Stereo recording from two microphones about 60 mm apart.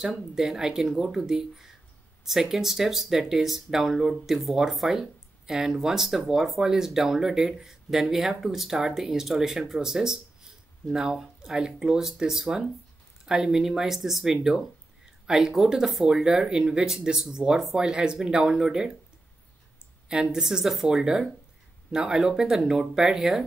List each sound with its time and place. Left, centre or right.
0.0 s speech: centre
20.3 s speech: centre